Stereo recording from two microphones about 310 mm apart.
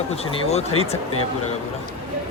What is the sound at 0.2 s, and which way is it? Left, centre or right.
Speech, centre.